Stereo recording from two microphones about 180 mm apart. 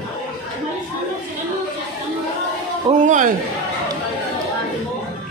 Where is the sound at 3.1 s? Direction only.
45° right (ahead or behind).